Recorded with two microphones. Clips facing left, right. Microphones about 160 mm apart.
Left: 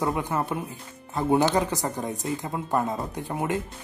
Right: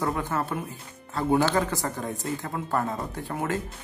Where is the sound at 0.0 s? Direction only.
15° left (ahead or behind).